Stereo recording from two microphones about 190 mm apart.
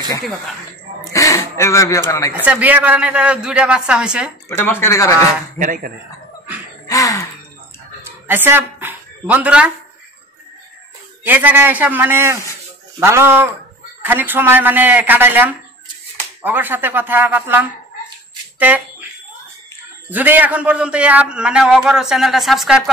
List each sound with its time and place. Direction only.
1.1 s speech: 15° left (ahead or behind)
2.4 s a man's voice: 10° right (ahead or behind)
4.5 s speech: 10° left (ahead or behind)
5.6 s speech: 45° right (ahead or behind)
6.9 s gasp: 20° left (ahead or behind)
8.3 s speech: 10° right (ahead or behind)
11.2 s speech: 10° right (ahead or behind)
18.6 s a sound: 10° right (ahead or behind)
20.1 s a man's voice: 10° right (ahead or behind)